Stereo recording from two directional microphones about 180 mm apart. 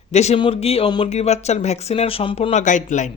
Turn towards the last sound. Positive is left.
turn(degrees=45)  # may be behind; listen again after turning